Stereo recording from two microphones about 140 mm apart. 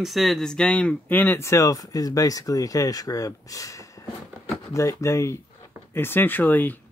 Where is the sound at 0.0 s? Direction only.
Centre (ahead or behind).